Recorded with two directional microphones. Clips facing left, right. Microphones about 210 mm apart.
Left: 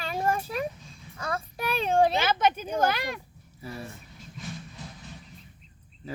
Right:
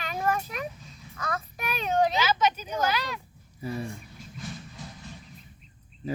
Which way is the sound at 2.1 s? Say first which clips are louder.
Left 1 dB; 55° left (ahead or behind).